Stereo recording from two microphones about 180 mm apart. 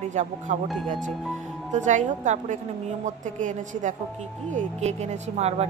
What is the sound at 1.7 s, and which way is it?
A woman's voice, 40° right (ahead or behind).